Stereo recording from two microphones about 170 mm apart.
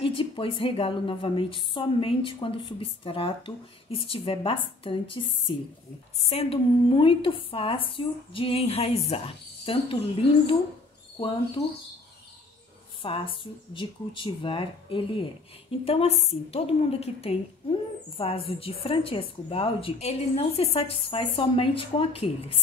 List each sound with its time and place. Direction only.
0.0 s a woman's voice: 30° left (ahead or behind)
13.0 s a woman's voice: 30° left (ahead or behind)